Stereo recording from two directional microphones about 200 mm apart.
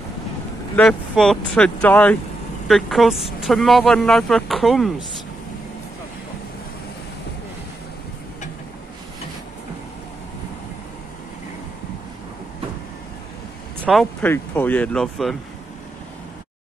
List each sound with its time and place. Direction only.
0.7 s speech: 5° left (ahead or behind)
13.9 s speech: centre (ahead or behind)
14.2 s speech: 10° left (ahead or behind)